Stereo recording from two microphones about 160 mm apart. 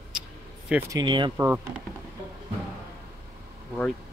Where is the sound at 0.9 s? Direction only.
30° right (ahead or behind).